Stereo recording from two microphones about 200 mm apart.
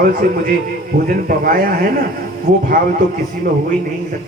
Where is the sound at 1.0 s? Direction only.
45° right (ahead or behind).